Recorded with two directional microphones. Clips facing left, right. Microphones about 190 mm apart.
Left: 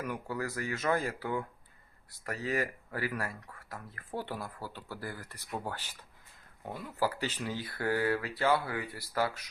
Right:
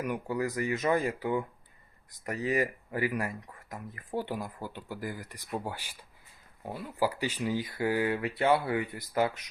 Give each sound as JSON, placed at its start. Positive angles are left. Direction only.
{"t": 0.0, "sound": "speech", "side_deg": -15}